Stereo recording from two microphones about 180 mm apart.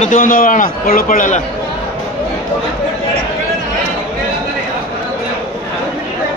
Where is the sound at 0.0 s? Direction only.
45° left (ahead or behind).